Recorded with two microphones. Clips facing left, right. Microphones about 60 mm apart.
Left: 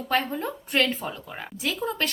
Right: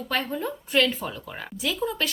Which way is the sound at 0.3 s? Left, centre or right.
Left.